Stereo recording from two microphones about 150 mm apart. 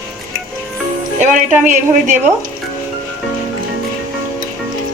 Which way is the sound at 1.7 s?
55° right (ahead or behind).